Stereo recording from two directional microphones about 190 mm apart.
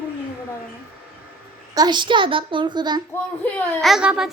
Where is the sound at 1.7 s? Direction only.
20° right (ahead or behind).